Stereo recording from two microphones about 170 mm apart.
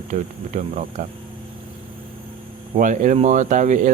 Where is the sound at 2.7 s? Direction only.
45° right (ahead or behind).